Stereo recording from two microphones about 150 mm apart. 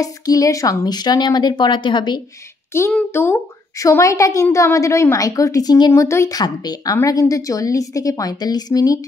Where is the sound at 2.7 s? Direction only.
15° left (ahead or behind).